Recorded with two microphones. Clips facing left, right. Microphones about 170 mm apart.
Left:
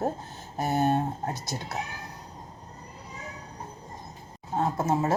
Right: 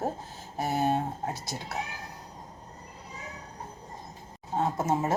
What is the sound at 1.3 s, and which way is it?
Speech, 20° left (ahead or behind).